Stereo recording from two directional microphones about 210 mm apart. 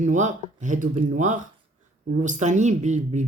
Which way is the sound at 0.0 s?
35° right (ahead or behind).